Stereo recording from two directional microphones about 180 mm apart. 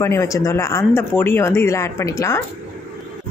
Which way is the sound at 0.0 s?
15° left (ahead or behind).